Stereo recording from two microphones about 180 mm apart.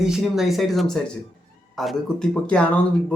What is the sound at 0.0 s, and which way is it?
Speech, centre (ahead or behind).